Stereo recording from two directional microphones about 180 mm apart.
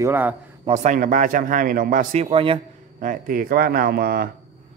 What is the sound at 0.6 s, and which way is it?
Speech, 40° right (ahead or behind).